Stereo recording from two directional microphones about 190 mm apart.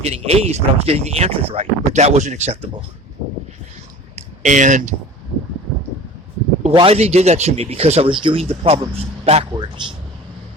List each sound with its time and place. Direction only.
0.0 s speech: 35° right (ahead or behind)
4.4 s speech: 40° right (ahead or behind)
6.6 s speech: 30° right (ahead or behind)